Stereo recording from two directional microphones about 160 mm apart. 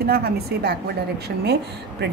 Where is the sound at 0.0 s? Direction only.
70° right (ahead or behind).